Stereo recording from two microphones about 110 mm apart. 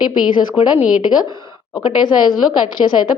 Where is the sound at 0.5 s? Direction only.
10° right (ahead or behind).